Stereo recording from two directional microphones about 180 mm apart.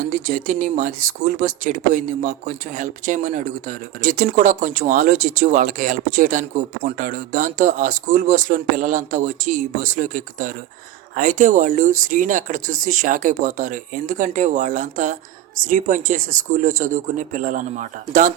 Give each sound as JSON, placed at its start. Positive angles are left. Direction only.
{"t": 0.0, "sound": "speech", "side_deg": -45}